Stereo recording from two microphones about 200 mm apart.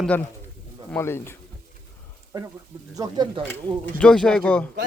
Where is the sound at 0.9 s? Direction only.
10° left (ahead or behind).